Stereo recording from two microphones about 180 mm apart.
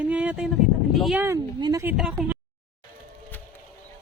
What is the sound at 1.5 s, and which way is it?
Speech, 25° right (ahead or behind).